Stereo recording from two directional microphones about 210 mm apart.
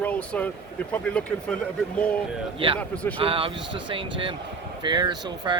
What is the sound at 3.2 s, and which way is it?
Speech, 25° right (ahead or behind).